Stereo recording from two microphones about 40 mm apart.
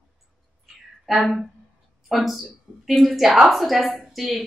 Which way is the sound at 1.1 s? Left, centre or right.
Centre.